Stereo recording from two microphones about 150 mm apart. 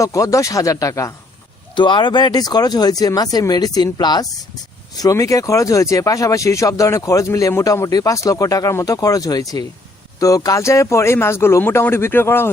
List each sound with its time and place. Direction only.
0.0 s speech: 20° left (ahead or behind)
1.7 s speech: 30° left (ahead or behind); by 12.5 s 15° left (ahead or behind)